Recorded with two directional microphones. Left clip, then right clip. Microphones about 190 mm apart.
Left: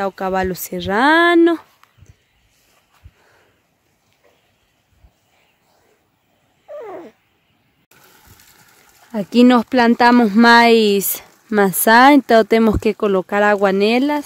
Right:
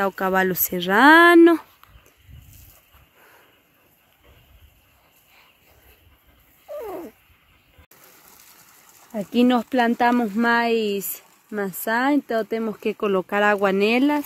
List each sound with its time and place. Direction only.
0.0 s speech: 5° left (ahead or behind)
6.8 s cat: 10° right (ahead or behind)
9.1 s speech: 40° left (ahead or behind)
12.8 s speech: 25° left (ahead or behind)